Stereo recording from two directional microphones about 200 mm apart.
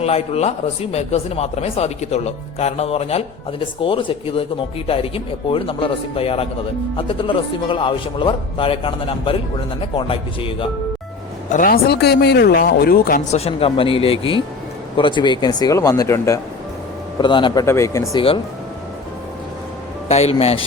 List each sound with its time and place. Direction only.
0.0 s speech: 30° left (ahead or behind)
11.5 s speech: 45° left (ahead or behind)
13.3 s speech: 30° left (ahead or behind)
20.1 s speech: 30° left (ahead or behind)